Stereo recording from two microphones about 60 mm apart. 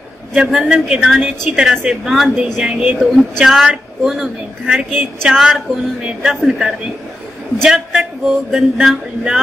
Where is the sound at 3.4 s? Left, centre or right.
Centre.